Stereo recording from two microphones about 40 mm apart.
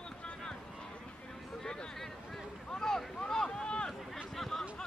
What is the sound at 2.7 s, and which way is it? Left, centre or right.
Boat, centre.